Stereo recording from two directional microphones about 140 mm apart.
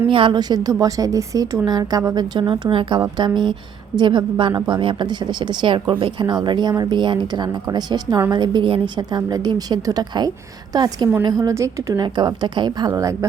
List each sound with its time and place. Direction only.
0.1 s a woman's voice: 35° right (ahead or behind)